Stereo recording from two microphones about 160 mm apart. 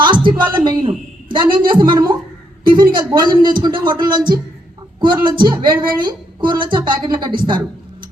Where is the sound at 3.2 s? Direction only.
25° right (ahead or behind).